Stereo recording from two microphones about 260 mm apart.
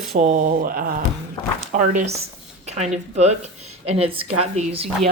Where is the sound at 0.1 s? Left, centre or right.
Right.